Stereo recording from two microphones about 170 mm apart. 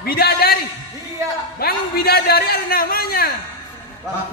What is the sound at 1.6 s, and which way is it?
A man's voice, 65° left (ahead or behind).